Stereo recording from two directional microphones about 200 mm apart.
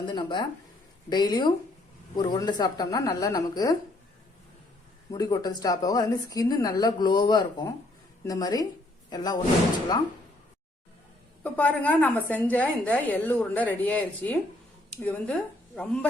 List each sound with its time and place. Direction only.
0.1 s a woman's voice: 20° left (ahead or behind)
5.1 s a woman's voice: 20° left (ahead or behind)
11.4 s a woman's voice: 10° left (ahead or behind)